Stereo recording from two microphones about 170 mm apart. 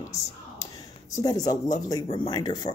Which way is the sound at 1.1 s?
20° left (ahead or behind).